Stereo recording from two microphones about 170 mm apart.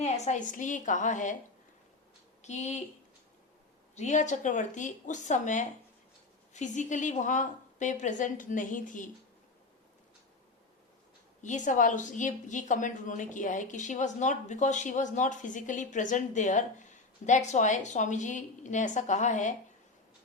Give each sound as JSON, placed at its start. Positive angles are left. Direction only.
{"t": 0.0, "sound": "a woman's voice", "side_deg": 45}
{"t": 2.4, "sound": "speech", "side_deg": 40}
{"t": 3.9, "sound": "a woman's voice", "side_deg": 45}
{"t": 11.4, "sound": "a woman's voice", "side_deg": 45}